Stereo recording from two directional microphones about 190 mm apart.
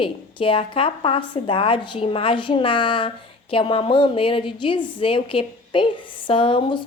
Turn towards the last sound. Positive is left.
turn(degrees=25)  # may be behind; listen again after turning